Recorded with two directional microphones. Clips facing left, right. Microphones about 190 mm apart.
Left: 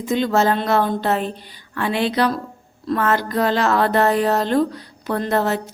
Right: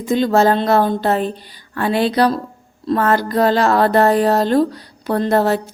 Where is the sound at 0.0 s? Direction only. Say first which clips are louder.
Right 4 dB; 35° right (ahead or behind).